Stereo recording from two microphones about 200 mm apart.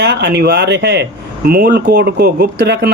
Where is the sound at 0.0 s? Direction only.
55° right (ahead or behind).